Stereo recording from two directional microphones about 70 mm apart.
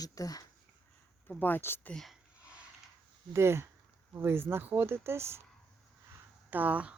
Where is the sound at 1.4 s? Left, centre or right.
Left.